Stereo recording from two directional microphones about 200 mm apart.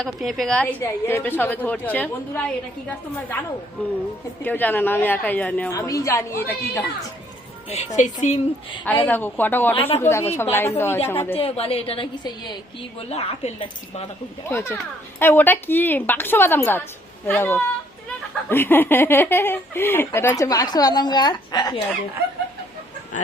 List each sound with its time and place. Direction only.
0.0 s a woman's voice: centre (ahead or behind)
4.4 s a woman's voice: 10° left (ahead or behind)
7.9 s speech: 35° left (ahead or behind)
8.8 s a woman's voice: 10° left (ahead or behind)
11.3 s a woman's voice: 30° left (ahead or behind)
14.5 s a woman's voice: 15° left (ahead or behind)